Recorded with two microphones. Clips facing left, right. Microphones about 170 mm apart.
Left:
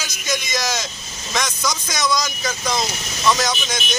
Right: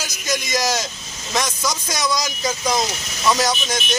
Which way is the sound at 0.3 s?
35° right (ahead or behind).